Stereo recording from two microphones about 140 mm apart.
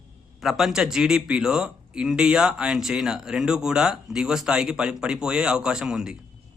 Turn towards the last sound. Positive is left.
turn(degrees=-5)  # may be behind; listen again after turning